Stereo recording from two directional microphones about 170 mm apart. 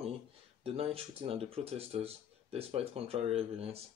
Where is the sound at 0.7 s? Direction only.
35° right (ahead or behind).